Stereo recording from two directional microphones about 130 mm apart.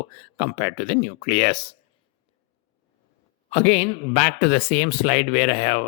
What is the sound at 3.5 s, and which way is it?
Speech, 55° left (ahead or behind).